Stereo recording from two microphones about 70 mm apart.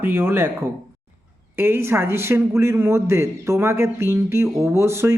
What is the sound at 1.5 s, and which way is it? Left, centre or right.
Speech, right.